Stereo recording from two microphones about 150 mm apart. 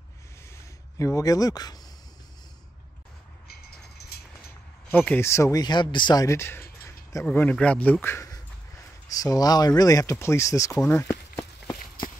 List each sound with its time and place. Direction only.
0.6 s speech: 20° left (ahead or behind)
4.0 s vehicle: 90° left
4.9 s speech: 10° left (ahead or behind); by 6.2 s 30° left (ahead or behind)
6.2 s speech: 15° left (ahead or behind)
10.8 s walk: 15° left (ahead or behind)